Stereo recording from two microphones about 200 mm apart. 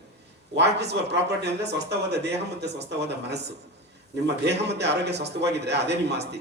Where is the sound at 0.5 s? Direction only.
60° right (ahead or behind).